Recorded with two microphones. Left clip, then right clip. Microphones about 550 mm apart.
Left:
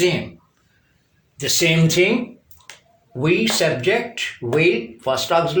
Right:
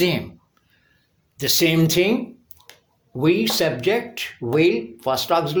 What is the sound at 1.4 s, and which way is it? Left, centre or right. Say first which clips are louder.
Speech: left 1 dB; right.